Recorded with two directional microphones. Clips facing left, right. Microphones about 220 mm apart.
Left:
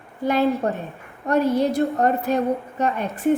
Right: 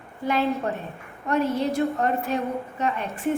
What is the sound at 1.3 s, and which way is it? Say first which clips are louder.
A woman's voice: left 4 dB; 35° left (ahead or behind).